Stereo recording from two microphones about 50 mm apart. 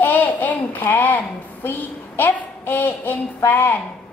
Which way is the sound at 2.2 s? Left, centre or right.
Left.